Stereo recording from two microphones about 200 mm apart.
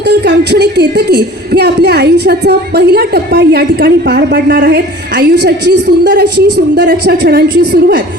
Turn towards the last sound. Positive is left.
turn(degrees=-55)  # may be behind; listen again after turning